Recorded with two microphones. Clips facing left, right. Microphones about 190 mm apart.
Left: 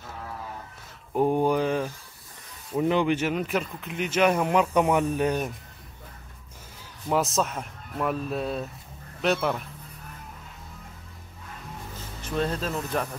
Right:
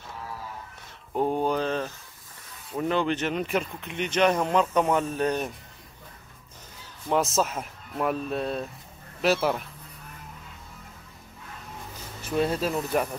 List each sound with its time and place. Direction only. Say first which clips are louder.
1.1 s a sound: left 3 dB; 10° left (ahead or behind)
2.8 s speech: left 2 dB; 15° left (ahead or behind)
7.1 s speech: right 1 dB; centre (ahead or behind)
12.4 s speech: right 3 dB; 10° right (ahead or behind)